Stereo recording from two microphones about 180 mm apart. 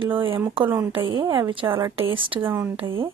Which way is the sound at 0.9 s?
25° right (ahead or behind).